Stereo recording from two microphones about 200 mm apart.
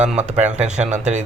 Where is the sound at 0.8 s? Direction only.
35° right (ahead or behind).